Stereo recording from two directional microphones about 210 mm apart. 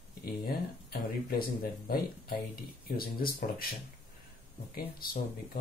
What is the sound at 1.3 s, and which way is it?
Speech, 45° left (ahead or behind).